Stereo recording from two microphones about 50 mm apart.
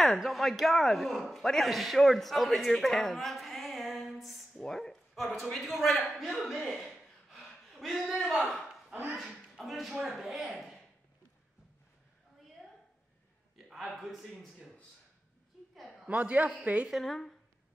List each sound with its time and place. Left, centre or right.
0.2 s a man's voice: centre
9.7 s a man's voice: centre
13.8 s a man's voice: centre
15.7 s a sound: centre
16.1 s a man's voice: right
17.0 s speech: centre